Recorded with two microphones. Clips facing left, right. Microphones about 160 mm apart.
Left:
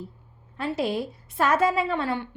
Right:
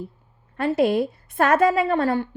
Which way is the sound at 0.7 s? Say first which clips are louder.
Right 7 dB; 55° right (ahead or behind).